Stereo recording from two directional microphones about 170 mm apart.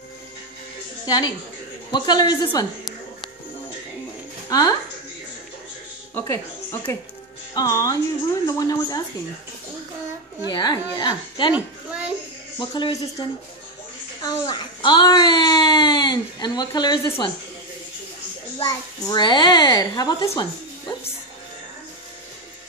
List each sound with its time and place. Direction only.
1.0 s a child's voice: 25° left (ahead or behind)
4.5 s a woman's voice: 20° left (ahead or behind)
6.1 s a child's voice: 15° left (ahead or behind)
10.5 s a child's voice: 25° left (ahead or behind)
12.5 s a child's voice: 30° left (ahead or behind)
18.7 s a child's voice: 25° left (ahead or behind)